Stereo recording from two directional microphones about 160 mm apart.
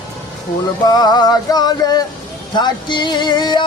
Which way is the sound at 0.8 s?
25° left (ahead or behind).